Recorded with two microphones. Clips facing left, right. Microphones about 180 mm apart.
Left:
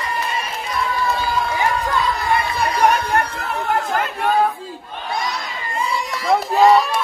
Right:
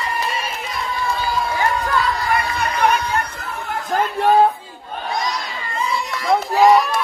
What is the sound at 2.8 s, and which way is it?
Chatter, 55° left (ahead or behind).